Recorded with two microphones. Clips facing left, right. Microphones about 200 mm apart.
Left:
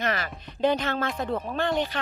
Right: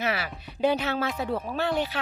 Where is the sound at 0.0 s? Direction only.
10° right (ahead or behind).